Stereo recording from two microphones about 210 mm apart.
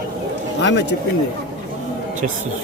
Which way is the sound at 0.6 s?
55° left (ahead or behind).